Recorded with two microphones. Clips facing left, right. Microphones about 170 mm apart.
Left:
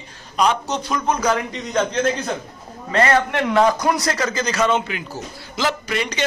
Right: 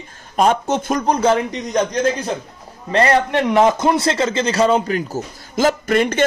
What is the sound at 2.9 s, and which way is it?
A man's voice, 30° right (ahead or behind).